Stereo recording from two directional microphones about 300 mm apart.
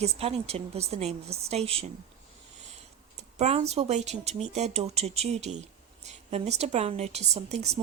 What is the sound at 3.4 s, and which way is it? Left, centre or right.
A woman's voice, right.